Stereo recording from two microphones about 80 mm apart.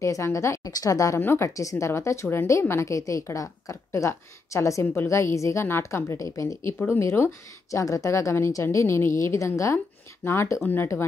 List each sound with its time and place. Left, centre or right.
0.0 s a woman's voice: left
1.2 s a woman's voice: left